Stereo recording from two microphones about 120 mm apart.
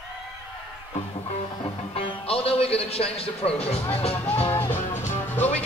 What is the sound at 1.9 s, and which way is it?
A man's voice, 50° left (ahead or behind).